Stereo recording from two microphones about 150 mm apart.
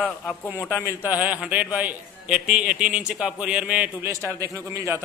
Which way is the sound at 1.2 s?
10° right (ahead or behind).